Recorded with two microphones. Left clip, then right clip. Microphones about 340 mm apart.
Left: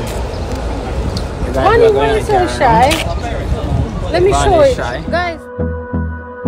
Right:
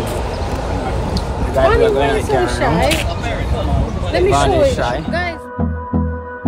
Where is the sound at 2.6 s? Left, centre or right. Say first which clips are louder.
Left 7 dB; left.